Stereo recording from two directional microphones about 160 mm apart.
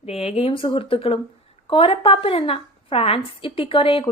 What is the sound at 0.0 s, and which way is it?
A woman's voice, 40° left (ahead or behind).